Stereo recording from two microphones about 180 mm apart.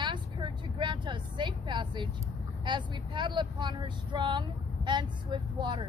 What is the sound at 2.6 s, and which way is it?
Speech, 25° right (ahead or behind).